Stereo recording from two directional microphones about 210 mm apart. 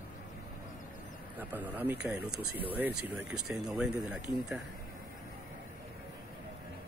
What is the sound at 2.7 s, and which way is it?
Speech, 10° right (ahead or behind).